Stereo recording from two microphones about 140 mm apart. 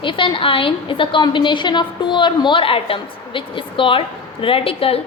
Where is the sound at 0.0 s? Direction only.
35° left (ahead or behind).